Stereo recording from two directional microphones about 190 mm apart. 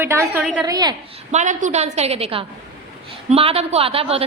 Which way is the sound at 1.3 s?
40° right (ahead or behind).